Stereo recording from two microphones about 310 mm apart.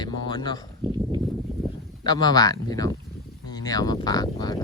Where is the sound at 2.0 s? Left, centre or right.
Centre.